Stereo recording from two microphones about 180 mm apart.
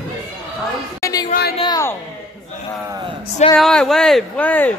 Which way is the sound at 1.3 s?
60° left (ahead or behind).